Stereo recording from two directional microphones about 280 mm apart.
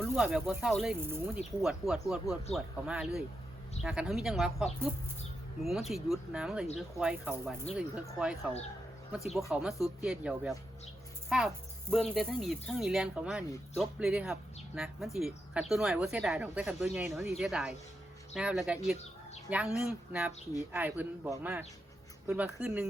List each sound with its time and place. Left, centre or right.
0.0 s speech: centre
9.5 s a man's voice: centre